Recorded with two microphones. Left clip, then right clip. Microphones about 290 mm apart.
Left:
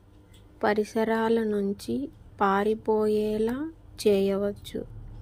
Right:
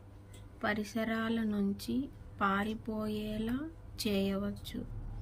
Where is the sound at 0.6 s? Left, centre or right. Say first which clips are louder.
Left 10 dB; centre.